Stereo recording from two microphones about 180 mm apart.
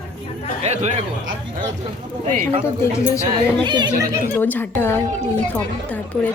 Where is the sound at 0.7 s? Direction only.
35° right (ahead or behind).